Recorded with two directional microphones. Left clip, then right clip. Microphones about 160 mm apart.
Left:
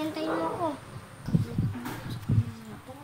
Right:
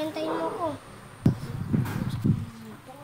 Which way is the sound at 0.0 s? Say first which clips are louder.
Right 1 dB; 20° right (ahead or behind).